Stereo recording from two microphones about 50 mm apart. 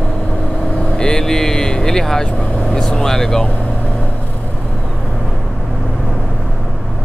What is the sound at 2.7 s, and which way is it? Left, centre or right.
Speech, centre.